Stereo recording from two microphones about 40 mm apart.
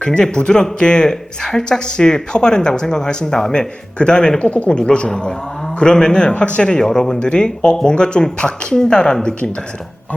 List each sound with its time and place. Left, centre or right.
0.0 s speech: left
4.4 s speech: left
6.3 s speech: left
6.6 s speech: left
7.2 s speech: left